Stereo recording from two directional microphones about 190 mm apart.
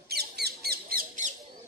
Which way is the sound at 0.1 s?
55° right (ahead or behind).